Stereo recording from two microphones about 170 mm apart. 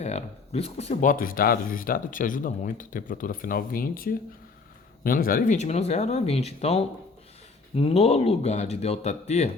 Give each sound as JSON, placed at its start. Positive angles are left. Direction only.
{"t": 0.0, "sound": "speech", "side_deg": 40}
{"t": 1.1, "sound": "speech", "side_deg": 55}